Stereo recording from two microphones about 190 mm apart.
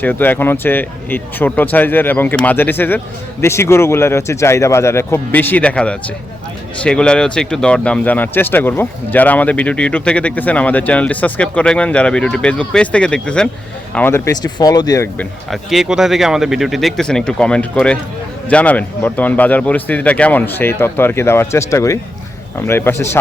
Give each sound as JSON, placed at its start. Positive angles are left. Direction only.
{"t": 0.0, "sound": "speech", "side_deg": 10}
{"t": 15.4, "sound": "speech", "side_deg": 0}